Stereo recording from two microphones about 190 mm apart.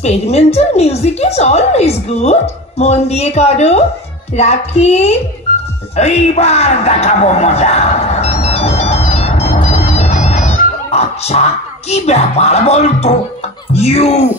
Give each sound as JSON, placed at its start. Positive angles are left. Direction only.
{"t": 0.0, "sound": "a woman's voice", "side_deg": 35}
{"t": 5.9, "sound": "a sound", "side_deg": 35}
{"t": 9.9, "sound": "music", "side_deg": 35}
{"t": 11.9, "sound": "a woman's voice", "side_deg": 35}